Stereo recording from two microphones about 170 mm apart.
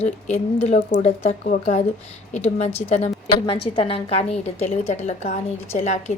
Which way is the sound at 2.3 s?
40° left (ahead or behind).